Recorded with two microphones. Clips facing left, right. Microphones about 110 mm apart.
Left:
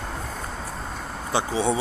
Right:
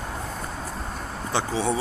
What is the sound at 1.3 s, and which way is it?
Speech, 15° left (ahead or behind).